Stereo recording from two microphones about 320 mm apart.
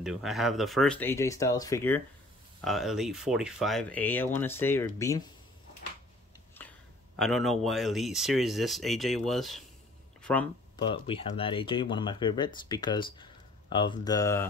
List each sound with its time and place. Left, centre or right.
0.0 s speech: centre
6.6 s a sound: centre
7.2 s speech: centre
10.9 s speech: centre